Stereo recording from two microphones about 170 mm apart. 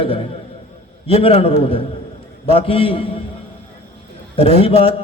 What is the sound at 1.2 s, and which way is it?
A man's voice, 35° left (ahead or behind).